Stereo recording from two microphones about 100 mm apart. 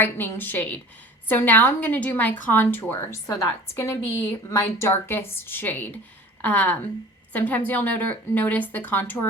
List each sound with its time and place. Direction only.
0.0 s a woman's voice: 20° left (ahead or behind)
3.2 s a woman's voice: 30° left (ahead or behind)